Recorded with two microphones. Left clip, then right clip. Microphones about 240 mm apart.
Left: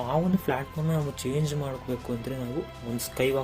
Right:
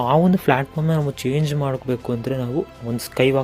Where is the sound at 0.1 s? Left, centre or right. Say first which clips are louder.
Right 10 dB; right.